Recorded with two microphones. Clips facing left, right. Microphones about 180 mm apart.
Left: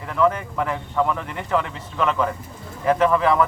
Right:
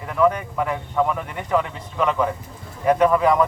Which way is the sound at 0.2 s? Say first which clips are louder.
Right 1 dB; 5° right (ahead or behind).